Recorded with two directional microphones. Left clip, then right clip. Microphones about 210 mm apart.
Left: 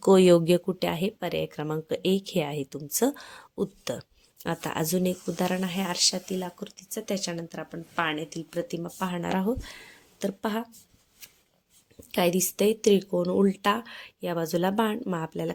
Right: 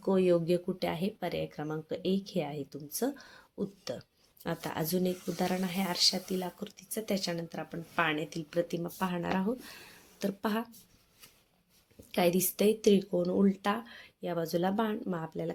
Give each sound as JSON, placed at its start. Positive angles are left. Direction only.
{"t": 0.0, "sound": "speech", "side_deg": 50}
{"t": 4.4, "sound": "speech", "side_deg": 25}
{"t": 11.9, "sound": "speech", "side_deg": 20}